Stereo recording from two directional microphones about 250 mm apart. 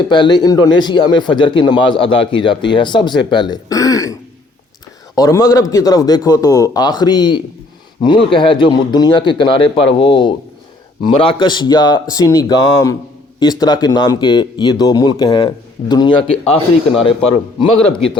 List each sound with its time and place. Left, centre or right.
0.1 s speech: centre